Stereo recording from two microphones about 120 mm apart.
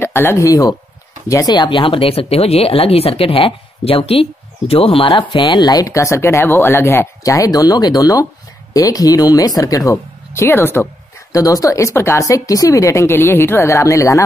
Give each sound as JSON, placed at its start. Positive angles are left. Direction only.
{"t": 0.0, "sound": "speech", "side_deg": 20}